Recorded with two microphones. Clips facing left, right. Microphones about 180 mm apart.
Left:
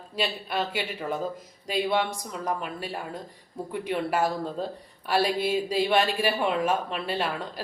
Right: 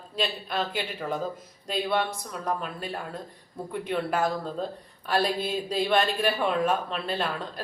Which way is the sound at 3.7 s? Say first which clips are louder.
Left 1 dB; 5° left (ahead or behind).